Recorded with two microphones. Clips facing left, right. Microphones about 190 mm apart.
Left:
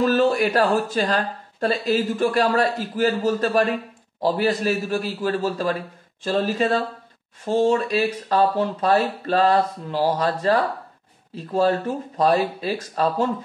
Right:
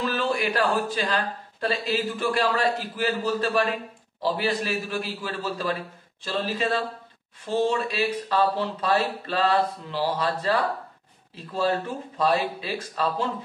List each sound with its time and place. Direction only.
0.0 s speech: 45° left (ahead or behind)